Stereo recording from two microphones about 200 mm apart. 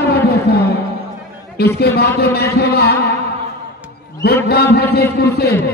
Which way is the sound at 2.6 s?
55° left (ahead or behind).